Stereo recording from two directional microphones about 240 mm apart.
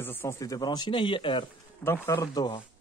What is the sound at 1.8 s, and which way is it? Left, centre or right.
Speech, centre.